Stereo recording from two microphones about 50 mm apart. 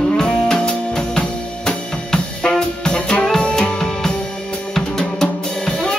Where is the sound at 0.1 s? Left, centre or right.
Centre.